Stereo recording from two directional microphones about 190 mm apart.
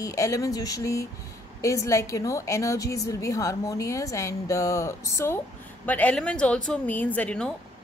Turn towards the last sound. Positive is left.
turn(degrees=5)  # may be behind; listen again after turning